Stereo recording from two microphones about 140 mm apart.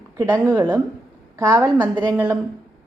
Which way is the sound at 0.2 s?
20° right (ahead or behind).